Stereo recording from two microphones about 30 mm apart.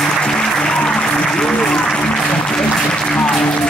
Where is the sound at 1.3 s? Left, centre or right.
Left.